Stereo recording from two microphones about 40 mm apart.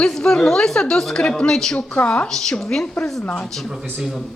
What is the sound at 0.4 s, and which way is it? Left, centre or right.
A woman's voice, centre.